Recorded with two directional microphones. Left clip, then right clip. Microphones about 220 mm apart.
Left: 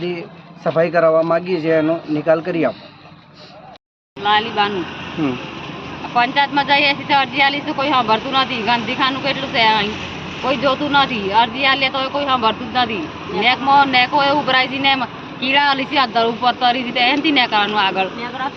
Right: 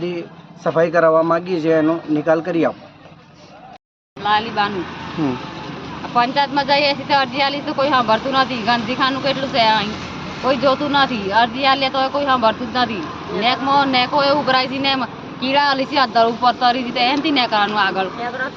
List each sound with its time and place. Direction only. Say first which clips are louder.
0.6 s speech: even; 5° right (ahead or behind)
4.2 s speech: left 2 dB; 10° right (ahead or behind)
6.1 s speech: left 1 dB; 10° right (ahead or behind)